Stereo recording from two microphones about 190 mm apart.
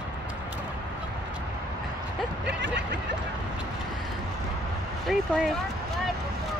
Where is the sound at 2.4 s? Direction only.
65° right (ahead or behind).